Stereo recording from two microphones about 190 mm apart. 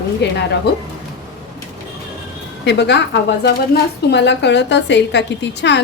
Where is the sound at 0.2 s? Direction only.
65° left (ahead or behind).